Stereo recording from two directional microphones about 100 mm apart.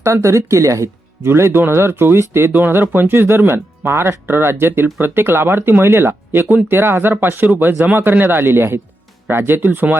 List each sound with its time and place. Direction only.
0.0 s speech: 30° right (ahead or behind)